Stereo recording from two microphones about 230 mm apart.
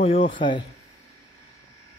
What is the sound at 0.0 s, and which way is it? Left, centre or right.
Speech, left.